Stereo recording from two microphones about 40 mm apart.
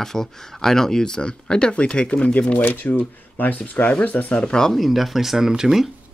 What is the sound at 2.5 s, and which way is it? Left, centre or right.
Speech, left.